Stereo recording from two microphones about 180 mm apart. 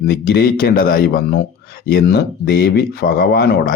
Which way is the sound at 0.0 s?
60° left (ahead or behind).